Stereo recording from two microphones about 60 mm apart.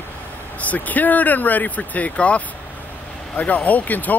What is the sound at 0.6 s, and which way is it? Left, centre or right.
Speech, left.